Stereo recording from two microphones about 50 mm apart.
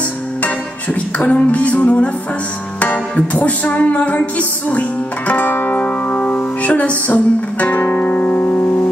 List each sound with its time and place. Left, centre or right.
1.1 s music: left